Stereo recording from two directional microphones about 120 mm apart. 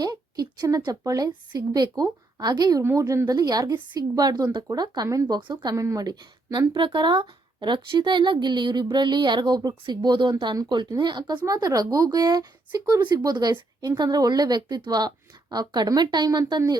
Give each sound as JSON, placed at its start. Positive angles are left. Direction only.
{"t": 0.0, "sound": "speech", "side_deg": -35}
{"t": 5.4, "sound": "speech", "side_deg": -40}
{"t": 5.7, "sound": "speech", "side_deg": -25}